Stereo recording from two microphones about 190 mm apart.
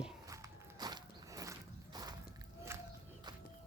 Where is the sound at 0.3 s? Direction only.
15° right (ahead or behind).